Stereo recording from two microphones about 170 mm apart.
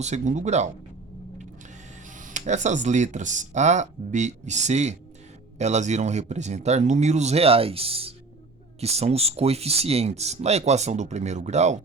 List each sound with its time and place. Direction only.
0.0 s speech: 45° right (ahead or behind)
2.0 s speech: 50° right (ahead or behind)